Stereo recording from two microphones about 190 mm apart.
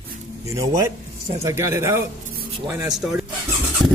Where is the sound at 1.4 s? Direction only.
15° right (ahead or behind).